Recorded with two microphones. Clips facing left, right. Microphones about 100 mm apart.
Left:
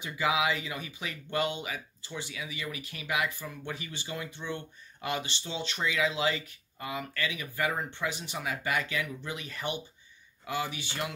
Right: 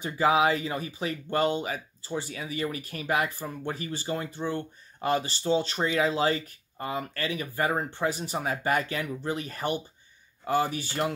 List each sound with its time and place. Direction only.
0.0 s speech: 40° right (ahead or behind)